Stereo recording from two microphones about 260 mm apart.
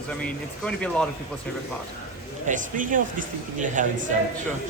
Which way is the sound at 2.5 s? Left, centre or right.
Right.